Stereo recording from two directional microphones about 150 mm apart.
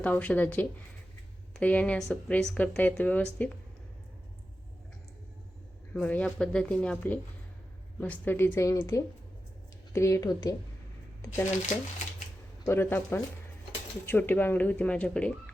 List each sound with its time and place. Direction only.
0.0 s speech: 10° left (ahead or behind)
5.9 s a woman's voice: 10° left (ahead or behind)
12.6 s speech: 15° left (ahead or behind)